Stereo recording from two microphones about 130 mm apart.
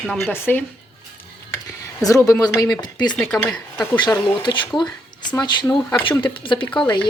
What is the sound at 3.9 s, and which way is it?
Speech, 35° left (ahead or behind).